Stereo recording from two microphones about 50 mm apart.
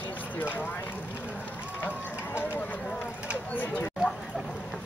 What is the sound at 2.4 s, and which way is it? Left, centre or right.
Run, left.